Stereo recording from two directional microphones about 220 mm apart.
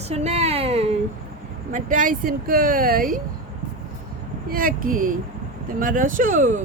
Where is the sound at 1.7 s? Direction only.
35° right (ahead or behind).